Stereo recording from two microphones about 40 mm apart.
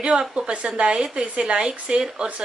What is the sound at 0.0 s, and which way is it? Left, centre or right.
A woman's voice, centre.